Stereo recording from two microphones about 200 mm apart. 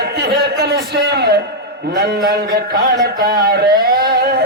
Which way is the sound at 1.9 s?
55° right (ahead or behind).